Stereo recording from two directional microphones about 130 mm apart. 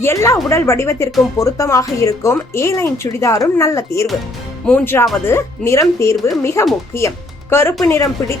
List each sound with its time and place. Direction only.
0.0 s speech: 20° left (ahead or behind)